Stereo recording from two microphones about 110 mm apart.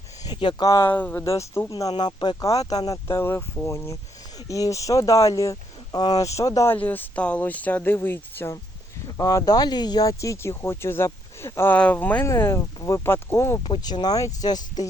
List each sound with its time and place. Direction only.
0.3 s speech: 45° left (ahead or behind)
0.9 s speech: 15° left (ahead or behind)
2.0 s speech: 40° left (ahead or behind)
6.7 s speech: 15° left (ahead or behind)
9.0 s speech: 30° left (ahead or behind)
13.6 s speech: 45° left (ahead or behind)